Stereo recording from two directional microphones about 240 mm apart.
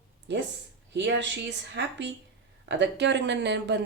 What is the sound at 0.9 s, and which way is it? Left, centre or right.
A woman's voice, right.